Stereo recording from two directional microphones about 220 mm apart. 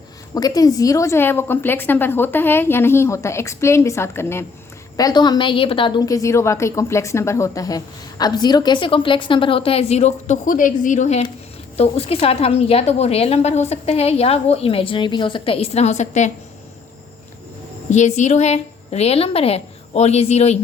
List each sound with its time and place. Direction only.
0.3 s a woman's voice: 15° left (ahead or behind)
17.9 s a woman's voice: 30° left (ahead or behind)